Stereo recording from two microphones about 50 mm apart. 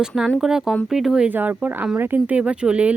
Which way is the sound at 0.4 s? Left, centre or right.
Centre.